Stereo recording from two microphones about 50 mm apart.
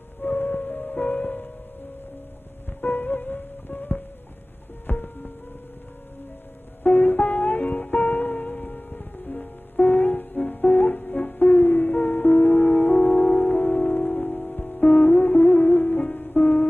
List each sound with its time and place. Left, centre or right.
0.2 s music: left
2.8 s music: left
6.8 s music: left